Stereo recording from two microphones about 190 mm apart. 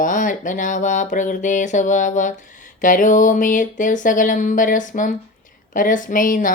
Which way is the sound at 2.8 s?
45° left (ahead or behind).